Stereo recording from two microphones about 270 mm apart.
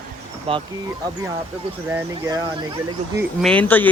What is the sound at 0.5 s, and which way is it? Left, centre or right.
Speech, centre.